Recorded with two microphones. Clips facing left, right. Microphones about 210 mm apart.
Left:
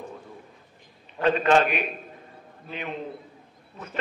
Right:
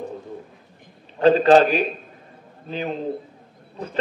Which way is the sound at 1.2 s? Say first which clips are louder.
Right 7 dB; 35° right (ahead or behind).